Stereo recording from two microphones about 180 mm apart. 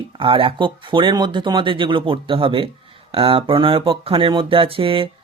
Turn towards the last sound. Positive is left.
turn(degrees=-30)  # may be behind; listen again after turning